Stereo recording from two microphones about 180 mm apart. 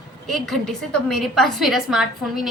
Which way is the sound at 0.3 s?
Centre (ahead or behind).